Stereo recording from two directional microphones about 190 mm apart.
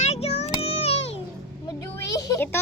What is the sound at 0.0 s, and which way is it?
Music, 35° left (ahead or behind).